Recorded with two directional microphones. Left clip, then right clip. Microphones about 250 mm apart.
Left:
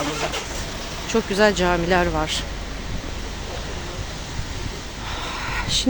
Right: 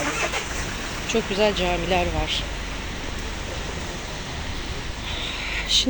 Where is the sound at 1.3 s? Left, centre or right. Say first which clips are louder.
Left 5 dB; left.